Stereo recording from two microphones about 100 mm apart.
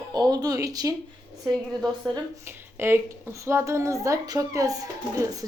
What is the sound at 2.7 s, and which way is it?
A woman's voice, 25° right (ahead or behind).